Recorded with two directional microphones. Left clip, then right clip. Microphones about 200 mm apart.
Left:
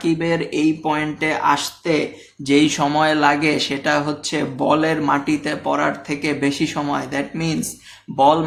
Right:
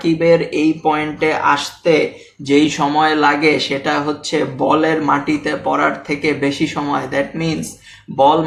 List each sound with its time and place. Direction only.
0.0 s speech: 40° left (ahead or behind)